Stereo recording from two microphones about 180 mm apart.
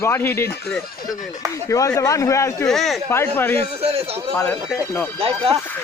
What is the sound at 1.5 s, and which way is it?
Speech, 15° left (ahead or behind).